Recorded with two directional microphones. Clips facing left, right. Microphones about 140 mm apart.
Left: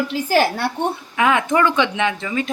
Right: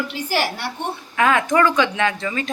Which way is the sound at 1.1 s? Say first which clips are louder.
Right 1 dB; 15° left (ahead or behind).